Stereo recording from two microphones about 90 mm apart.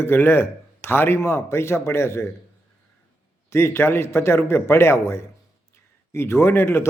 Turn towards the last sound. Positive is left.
turn(degrees=30)  # may be behind; listen again after turning